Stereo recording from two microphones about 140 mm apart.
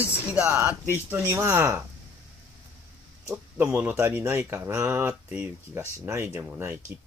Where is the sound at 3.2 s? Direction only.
15° right (ahead or behind).